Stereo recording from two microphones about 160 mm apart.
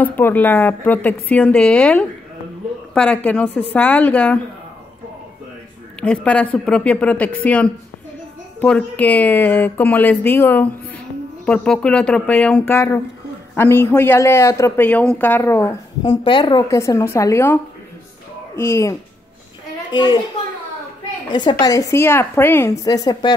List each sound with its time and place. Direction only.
0.0 s a man's voice: 10° left (ahead or behind)
5.9 s a man's voice: 10° left (ahead or behind)
18.6 s a man's voice: 20° left (ahead or behind)
19.9 s a woman's voice: 30° left (ahead or behind)
21.3 s a woman's voice: 30° left (ahead or behind)